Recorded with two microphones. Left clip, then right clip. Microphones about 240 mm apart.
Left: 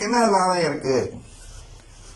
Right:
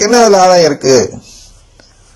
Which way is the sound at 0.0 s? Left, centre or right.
Right.